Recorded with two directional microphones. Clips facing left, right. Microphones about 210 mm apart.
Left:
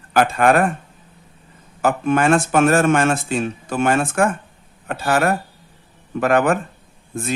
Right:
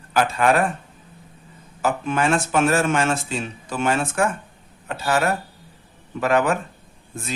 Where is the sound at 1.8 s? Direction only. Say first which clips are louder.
Left 4 dB; 55° left (ahead or behind).